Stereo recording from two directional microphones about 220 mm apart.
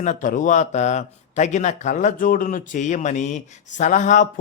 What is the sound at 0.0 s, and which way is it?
Speech, 35° left (ahead or behind).